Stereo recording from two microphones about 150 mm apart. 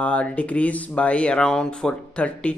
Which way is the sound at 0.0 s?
10° left (ahead or behind).